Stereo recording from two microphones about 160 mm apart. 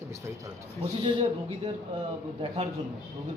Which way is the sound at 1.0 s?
35° right (ahead or behind).